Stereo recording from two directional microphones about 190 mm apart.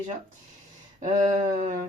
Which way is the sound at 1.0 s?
35° right (ahead or behind).